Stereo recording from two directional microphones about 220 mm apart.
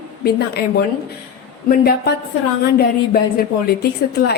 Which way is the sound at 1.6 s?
45° left (ahead or behind).